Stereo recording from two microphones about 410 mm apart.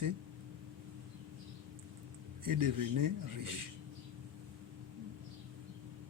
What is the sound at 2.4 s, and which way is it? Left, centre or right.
A man's voice, right.